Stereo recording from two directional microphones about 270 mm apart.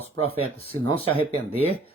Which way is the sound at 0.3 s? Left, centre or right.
Left.